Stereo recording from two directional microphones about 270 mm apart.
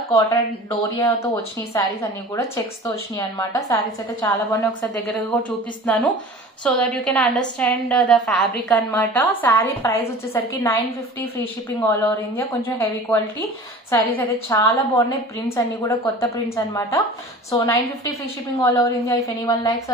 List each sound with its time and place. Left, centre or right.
0.1 s a woman's voice: centre
3.2 s a woman's voice: centre
5.9 s a woman's voice: centre